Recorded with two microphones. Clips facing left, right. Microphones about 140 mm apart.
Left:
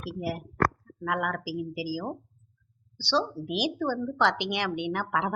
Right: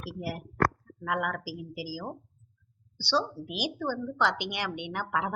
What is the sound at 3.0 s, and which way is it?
Speech, 20° left (ahead or behind).